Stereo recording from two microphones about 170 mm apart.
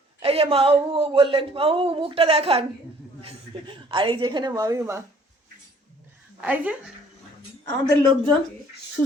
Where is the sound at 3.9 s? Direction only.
30° right (ahead or behind).